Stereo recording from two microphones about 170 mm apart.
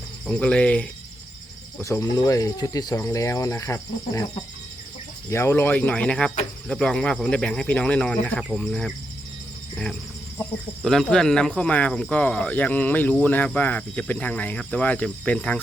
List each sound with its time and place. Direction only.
0.3 s speech: 5° left (ahead or behind)
1.8 s speech: 20° left (ahead or behind)
5.3 s speech: 15° left (ahead or behind)
10.8 s speech: centre (ahead or behind)